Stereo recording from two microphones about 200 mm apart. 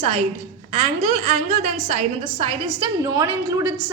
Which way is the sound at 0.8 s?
35° right (ahead or behind).